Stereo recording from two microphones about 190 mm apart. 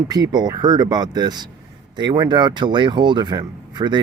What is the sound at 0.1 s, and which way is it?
Speech, 20° right (ahead or behind).